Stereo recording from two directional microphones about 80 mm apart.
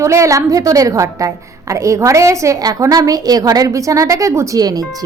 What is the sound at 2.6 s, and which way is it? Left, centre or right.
A woman's voice, right.